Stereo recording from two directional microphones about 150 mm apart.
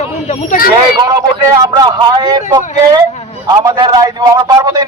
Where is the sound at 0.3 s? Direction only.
60° left (ahead or behind).